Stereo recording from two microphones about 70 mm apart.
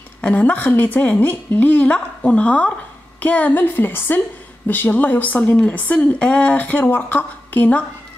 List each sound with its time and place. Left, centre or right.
0.2 s a woman's voice: left